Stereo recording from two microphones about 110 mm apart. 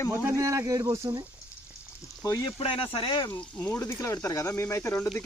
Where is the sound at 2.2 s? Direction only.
30° left (ahead or behind).